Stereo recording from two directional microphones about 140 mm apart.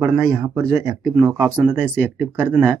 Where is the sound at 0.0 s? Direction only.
20° right (ahead or behind).